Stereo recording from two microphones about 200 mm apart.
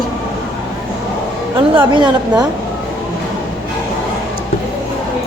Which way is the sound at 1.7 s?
25° right (ahead or behind).